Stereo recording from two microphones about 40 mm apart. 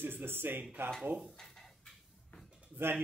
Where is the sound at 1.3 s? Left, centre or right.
Centre.